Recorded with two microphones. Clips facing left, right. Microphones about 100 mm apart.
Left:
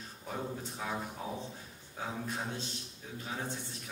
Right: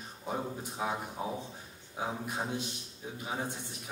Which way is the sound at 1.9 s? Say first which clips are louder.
Right 3 dB; 15° right (ahead or behind).